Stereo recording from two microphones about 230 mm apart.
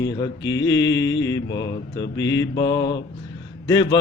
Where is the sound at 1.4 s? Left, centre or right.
Left.